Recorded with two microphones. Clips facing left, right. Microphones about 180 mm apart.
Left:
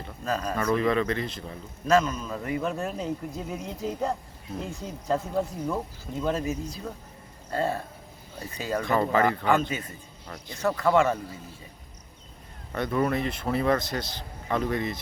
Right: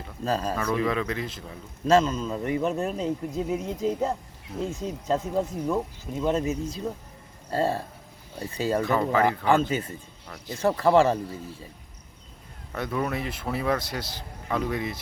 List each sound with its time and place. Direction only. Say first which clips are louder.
0.3 s speech: right 2 dB; 30° right (ahead or behind)
0.6 s speech: left 2 dB; centre (ahead or behind)
1.9 s speech: right 2 dB; 30° right (ahead or behind)
8.8 s speech: left 1 dB; centre (ahead or behind)
9.6 s speech: right 5 dB; 30° right (ahead or behind)
12.7 s a man's voice: left 3 dB; centre (ahead or behind)